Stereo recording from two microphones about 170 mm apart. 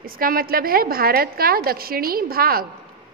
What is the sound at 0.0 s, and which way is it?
A woman's voice, 60° right (ahead or behind).